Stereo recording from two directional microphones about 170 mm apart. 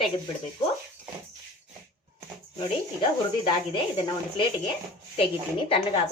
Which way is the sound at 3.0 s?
25° left (ahead or behind).